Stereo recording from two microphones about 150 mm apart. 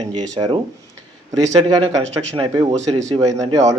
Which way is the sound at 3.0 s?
45° right (ahead or behind).